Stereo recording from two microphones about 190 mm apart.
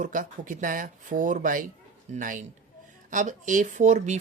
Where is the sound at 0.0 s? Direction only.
45° right (ahead or behind).